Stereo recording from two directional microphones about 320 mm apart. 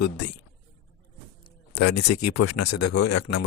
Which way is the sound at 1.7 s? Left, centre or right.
Left.